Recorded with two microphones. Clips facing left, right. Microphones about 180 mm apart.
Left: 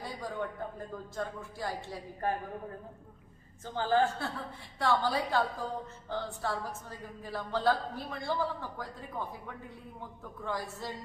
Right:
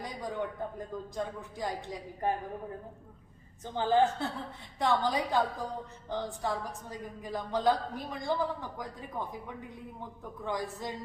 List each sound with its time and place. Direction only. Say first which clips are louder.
0.0 s a sound: right 2 dB; 15° right (ahead or behind)
1.1 s a woman's voice: left 1 dB; 15° right (ahead or behind)
3.6 s a woman's voice: right 2 dB; 20° right (ahead or behind)
10.4 s a woman's voice: right 2 dB; 15° right (ahead or behind)